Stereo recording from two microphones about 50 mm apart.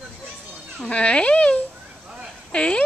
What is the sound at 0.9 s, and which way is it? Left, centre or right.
Cat, left.